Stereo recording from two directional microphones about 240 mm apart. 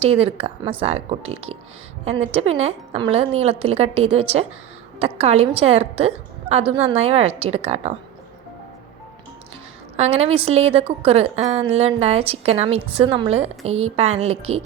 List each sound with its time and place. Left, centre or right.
0.2 s a woman's voice: right
10.0 s a woman's voice: right